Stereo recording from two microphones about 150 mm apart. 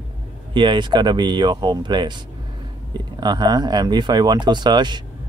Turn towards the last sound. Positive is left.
turn(degrees=-30)  # may be behind; listen again after turning